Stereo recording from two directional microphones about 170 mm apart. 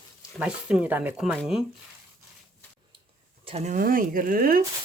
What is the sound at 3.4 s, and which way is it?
Speech, 40° right (ahead or behind).